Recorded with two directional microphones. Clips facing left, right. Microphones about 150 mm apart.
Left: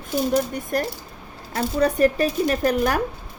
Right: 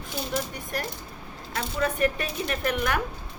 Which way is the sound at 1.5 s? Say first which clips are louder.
Left 7 dB; 35° left (ahead or behind).